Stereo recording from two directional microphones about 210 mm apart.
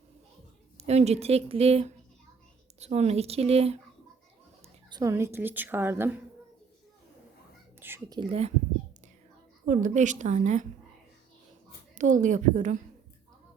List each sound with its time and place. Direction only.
0.8 s speech: 30° right (ahead or behind)
4.9 s a woman's voice: 15° right (ahead or behind)
7.8 s speech: 10° right (ahead or behind); by 8.5 s 30° right (ahead or behind)
9.6 s speech: 35° right (ahead or behind)
11.9 s speech: 35° right (ahead or behind)